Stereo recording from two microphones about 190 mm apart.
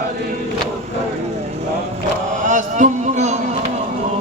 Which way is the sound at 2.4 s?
40° right (ahead or behind).